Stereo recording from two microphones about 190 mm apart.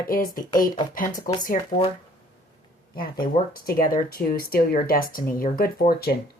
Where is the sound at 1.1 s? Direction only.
20° left (ahead or behind).